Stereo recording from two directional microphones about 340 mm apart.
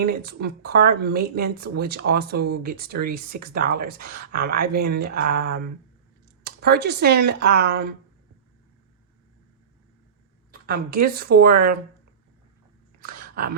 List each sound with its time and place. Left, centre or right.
0.0 s speech: right
10.5 s speech: right
13.0 s a sound: right